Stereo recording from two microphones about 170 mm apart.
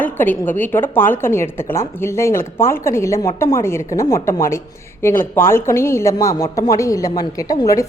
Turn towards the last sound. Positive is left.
turn(degrees=20)  # may be behind; listen again after turning